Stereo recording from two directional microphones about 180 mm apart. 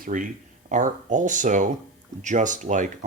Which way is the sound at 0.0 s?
45° right (ahead or behind).